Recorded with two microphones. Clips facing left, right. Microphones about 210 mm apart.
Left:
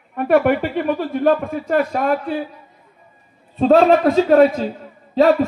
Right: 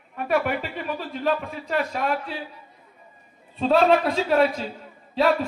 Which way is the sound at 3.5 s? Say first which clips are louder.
Left 6 dB; 45° left (ahead or behind).